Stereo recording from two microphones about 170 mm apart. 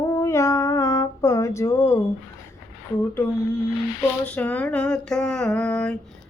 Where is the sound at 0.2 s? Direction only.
15° left (ahead or behind).